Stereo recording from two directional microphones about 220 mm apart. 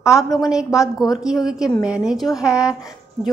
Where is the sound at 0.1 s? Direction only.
15° left (ahead or behind).